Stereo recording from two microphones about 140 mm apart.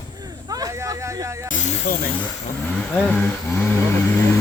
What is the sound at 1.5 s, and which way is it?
Snake, 65° left (ahead or behind).